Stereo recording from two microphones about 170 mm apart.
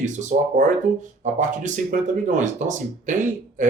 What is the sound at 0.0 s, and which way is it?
Speech, 45° right (ahead or behind).